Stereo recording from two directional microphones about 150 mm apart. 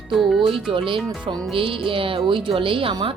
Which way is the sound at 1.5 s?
35° right (ahead or behind).